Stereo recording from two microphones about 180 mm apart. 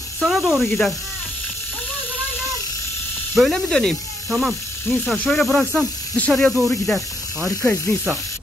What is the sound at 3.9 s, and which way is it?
Snake, 20° left (ahead or behind).